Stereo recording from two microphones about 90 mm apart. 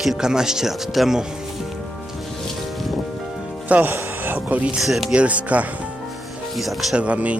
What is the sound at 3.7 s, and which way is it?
Speech, 25° right (ahead or behind).